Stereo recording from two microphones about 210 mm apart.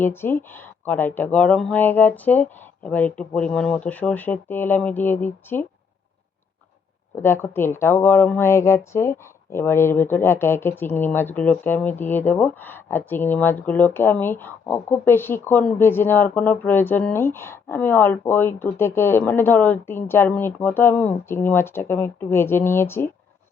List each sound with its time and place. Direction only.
0.0 s speech: 10° left (ahead or behind)
7.2 s speech: 10° left (ahead or behind)